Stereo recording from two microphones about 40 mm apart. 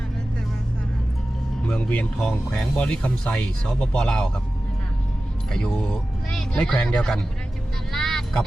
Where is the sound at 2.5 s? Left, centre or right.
Left.